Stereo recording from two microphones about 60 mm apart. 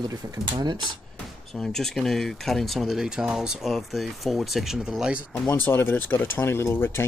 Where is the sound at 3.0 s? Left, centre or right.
Centre.